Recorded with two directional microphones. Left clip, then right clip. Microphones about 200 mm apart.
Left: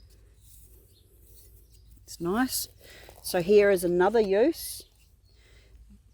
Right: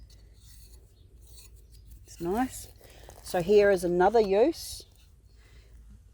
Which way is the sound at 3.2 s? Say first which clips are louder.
Left 1 dB; 30° left (ahead or behind).